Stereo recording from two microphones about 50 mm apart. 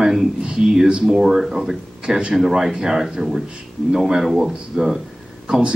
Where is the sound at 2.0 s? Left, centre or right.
Centre.